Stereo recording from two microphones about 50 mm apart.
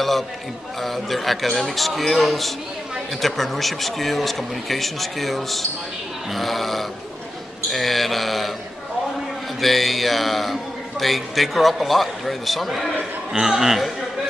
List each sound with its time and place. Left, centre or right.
0.8 s a man's voice: centre
9.6 s a man's voice: centre